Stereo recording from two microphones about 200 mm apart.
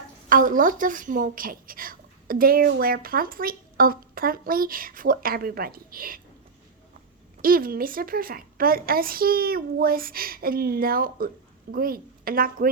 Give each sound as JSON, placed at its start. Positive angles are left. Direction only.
{"t": 0.3, "sound": "a woman's voice", "side_deg": -40}
{"t": 7.4, "sound": "a woman's voice", "side_deg": -45}